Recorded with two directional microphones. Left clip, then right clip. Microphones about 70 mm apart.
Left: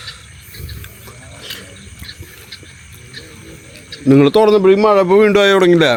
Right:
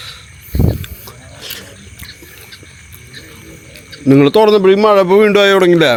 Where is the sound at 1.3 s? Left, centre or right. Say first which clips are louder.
Right 2 dB; right.